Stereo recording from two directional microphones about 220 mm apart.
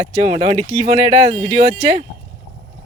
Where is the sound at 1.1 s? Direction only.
25° right (ahead or behind).